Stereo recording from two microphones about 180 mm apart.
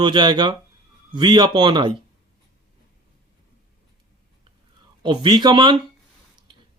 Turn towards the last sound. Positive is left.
turn(degrees=-25)  # may be behind; listen again after turning